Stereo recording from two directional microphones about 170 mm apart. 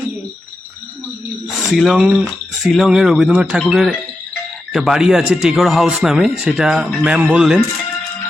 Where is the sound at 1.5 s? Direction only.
Centre (ahead or behind).